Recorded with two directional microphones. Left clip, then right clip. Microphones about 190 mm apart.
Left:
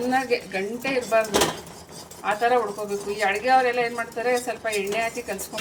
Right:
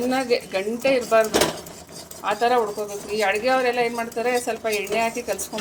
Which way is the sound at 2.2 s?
40° right (ahead or behind).